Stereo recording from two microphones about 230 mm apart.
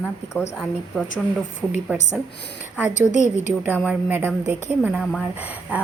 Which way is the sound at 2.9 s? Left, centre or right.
Left.